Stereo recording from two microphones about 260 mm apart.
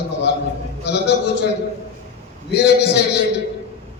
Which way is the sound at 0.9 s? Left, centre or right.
Left.